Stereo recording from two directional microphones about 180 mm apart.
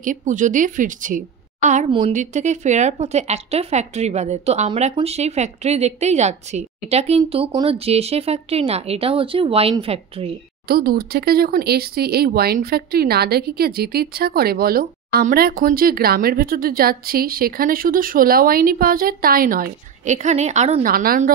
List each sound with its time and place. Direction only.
0.0 s a woman's voice: 45° right (ahead or behind)
1.9 s a woman's voice: 30° right (ahead or behind)
2.1 s speech: 40° right (ahead or behind)
10.7 s speech: 55° right (ahead or behind); by 20.8 s 40° right (ahead or behind)
20.8 s a woman's voice: 55° right (ahead or behind)